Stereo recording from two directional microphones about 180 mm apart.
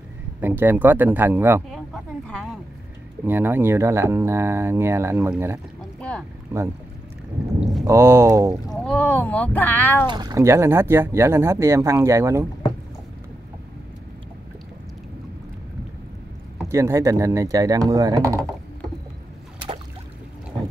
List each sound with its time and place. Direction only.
0.4 s speech: 10° right (ahead or behind)
3.3 s speech: 10° right (ahead or behind)
5.9 s boat: 5° left (ahead or behind)
7.8 s speech: 15° right (ahead or behind)
8.7 s speech: 5° left (ahead or behind)
10.0 s speech: 25° right (ahead or behind)
16.6 s speech: 15° right (ahead or behind)